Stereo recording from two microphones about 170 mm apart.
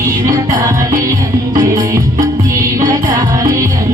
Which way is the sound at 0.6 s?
20° right (ahead or behind).